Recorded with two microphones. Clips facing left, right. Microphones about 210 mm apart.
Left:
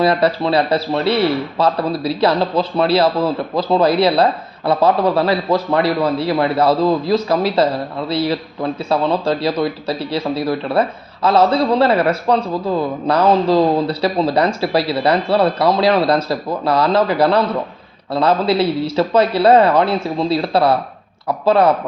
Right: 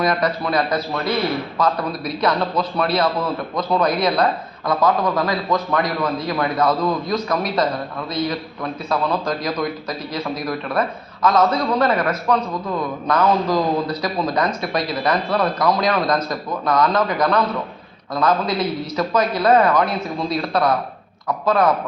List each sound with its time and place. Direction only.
0.0 s a man's voice: 30° left (ahead or behind)